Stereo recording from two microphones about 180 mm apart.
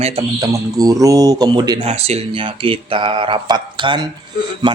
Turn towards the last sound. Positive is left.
turn(degrees=-25)  # may be behind; listen again after turning